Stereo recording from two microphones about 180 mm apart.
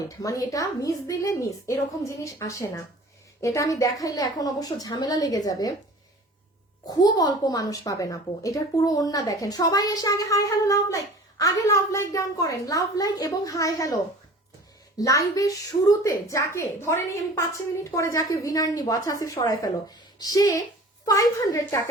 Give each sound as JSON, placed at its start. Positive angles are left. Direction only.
{"t": 0.2, "sound": "a woman's voice", "side_deg": 20}
{"t": 6.8, "sound": "a woman's voice", "side_deg": 20}